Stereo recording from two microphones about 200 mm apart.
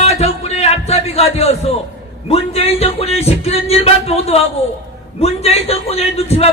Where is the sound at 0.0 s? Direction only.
30° left (ahead or behind).